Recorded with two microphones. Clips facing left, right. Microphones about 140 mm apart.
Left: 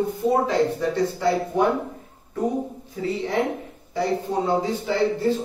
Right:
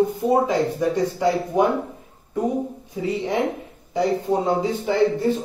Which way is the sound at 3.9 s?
15° right (ahead or behind).